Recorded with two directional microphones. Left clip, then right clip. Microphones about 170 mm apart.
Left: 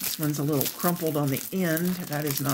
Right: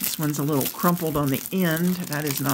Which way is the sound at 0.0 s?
30° right (ahead or behind).